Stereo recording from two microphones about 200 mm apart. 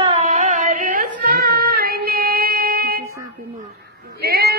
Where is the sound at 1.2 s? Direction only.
50° right (ahead or behind).